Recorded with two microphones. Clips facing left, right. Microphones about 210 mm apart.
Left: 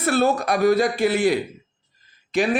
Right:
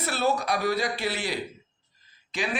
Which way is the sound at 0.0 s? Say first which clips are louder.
Left 7 dB; 50° left (ahead or behind).